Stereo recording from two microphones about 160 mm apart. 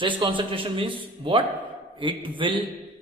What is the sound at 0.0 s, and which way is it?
A man's voice, 30° right (ahead or behind).